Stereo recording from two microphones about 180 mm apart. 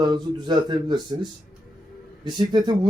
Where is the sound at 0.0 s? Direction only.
25° right (ahead or behind).